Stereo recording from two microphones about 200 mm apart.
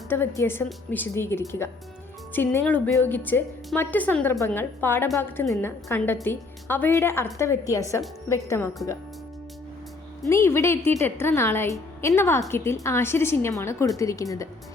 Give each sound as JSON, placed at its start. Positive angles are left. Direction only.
{"t": 0.1, "sound": "a woman's voice", "side_deg": 10}
{"t": 10.2, "sound": "a woman's voice", "side_deg": 15}